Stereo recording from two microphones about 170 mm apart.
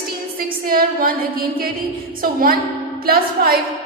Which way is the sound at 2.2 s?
60° right (ahead or behind).